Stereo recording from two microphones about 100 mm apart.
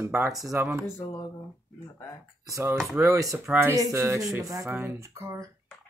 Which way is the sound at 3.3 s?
20° right (ahead or behind).